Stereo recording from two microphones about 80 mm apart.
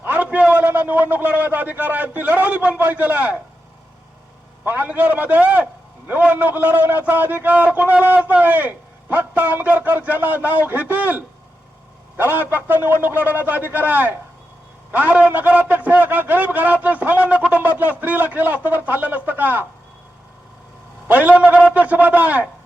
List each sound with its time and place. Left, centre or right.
0.0 s a sound: right
4.6 s a man's voice: right
21.1 s a man's voice: centre